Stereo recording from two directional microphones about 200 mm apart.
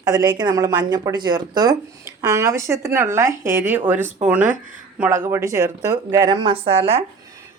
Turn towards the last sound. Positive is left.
turn(degrees=-30)  # may be behind; listen again after turning